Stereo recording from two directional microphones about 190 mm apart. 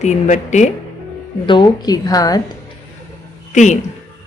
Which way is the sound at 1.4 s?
25° left (ahead or behind).